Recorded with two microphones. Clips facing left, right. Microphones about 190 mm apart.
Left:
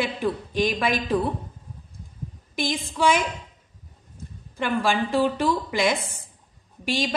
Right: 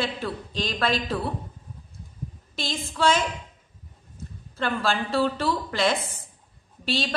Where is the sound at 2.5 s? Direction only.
15° left (ahead or behind).